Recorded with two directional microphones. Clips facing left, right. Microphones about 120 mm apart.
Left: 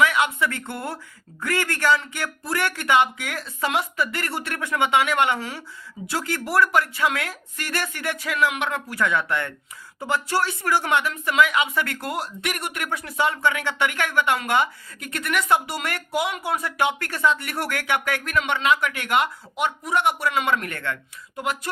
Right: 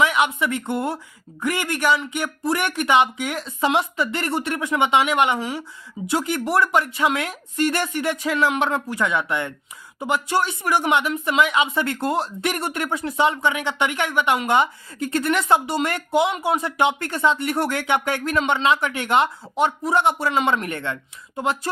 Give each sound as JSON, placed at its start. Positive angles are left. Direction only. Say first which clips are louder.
{"t": 0.0, "sound": "speech", "louder": "right 1 dB", "side_deg": -20}